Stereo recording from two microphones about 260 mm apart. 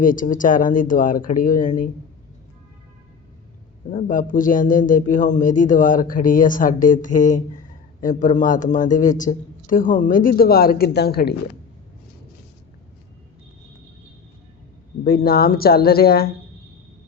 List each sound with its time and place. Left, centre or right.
0.0 s speech: left
3.9 s speech: left
15.0 s speech: left